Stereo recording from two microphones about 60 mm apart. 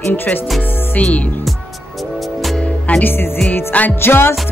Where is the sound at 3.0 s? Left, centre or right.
Left.